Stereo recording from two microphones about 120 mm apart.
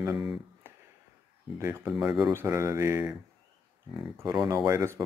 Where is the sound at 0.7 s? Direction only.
20° right (ahead or behind).